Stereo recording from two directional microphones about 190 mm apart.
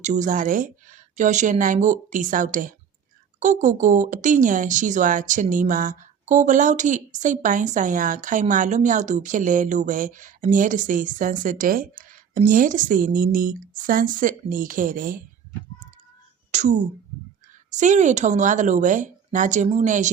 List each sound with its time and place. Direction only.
0.0 s speech: 40° right (ahead or behind)
16.5 s a sound: 40° right (ahead or behind)
17.7 s a woman's voice: 40° right (ahead or behind)